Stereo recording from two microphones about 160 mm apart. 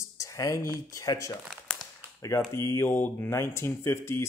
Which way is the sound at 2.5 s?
15° left (ahead or behind).